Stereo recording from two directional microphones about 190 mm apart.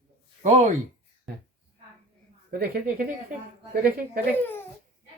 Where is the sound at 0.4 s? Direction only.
35° right (ahead or behind).